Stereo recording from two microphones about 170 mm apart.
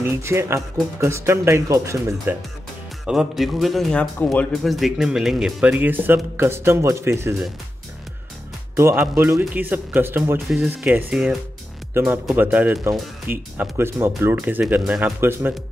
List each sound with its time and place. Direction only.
0.0 s speech: 15° right (ahead or behind)
3.1 s a man's voice: centre (ahead or behind)
8.7 s a man's voice: 15° right (ahead or behind)